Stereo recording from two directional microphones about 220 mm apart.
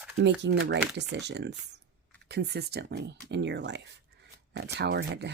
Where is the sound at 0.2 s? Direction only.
50° right (ahead or behind).